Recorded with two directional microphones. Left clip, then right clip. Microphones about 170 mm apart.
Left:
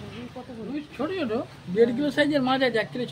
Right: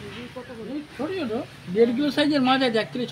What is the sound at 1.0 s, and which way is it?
Speech, centre (ahead or behind).